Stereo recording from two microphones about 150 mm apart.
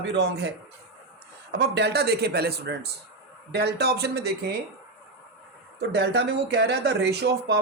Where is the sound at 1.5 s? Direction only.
90° right.